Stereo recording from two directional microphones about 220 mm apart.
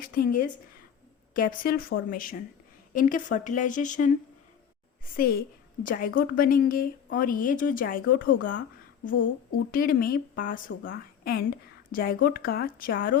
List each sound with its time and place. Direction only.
0.0 s a woman's voice: 40° left (ahead or behind)
5.1 s a woman's voice: 40° left (ahead or behind)
9.7 s a woman's voice: 40° left (ahead or behind)